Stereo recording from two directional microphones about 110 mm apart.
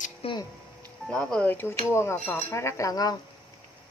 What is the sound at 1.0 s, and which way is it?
Speech, 10° left (ahead or behind).